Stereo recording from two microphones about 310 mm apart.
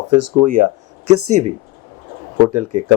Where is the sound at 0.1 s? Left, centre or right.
Right.